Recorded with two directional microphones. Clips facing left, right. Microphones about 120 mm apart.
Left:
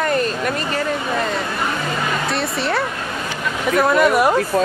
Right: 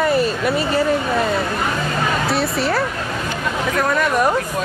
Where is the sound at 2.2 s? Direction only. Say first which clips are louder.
Right 2 dB; centre (ahead or behind).